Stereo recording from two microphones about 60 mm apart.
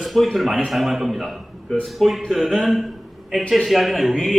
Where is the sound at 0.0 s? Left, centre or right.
Centre.